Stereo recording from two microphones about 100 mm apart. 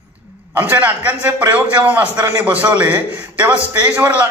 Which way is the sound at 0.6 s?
15° right (ahead or behind).